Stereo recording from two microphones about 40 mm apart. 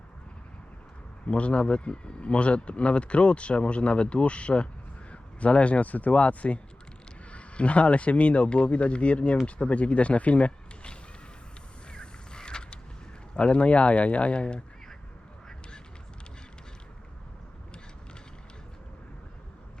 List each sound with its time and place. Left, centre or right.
1.3 s speech: left
11.9 s mechanisms: left
13.3 s speech: left